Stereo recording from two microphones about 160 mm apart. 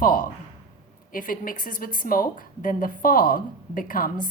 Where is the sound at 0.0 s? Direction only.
60° left (ahead or behind).